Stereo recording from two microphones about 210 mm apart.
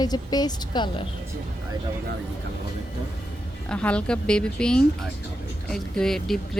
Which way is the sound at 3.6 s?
5° left (ahead or behind).